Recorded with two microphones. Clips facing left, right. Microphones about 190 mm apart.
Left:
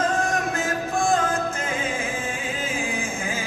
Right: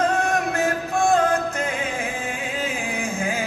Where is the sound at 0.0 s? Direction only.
65° right (ahead or behind).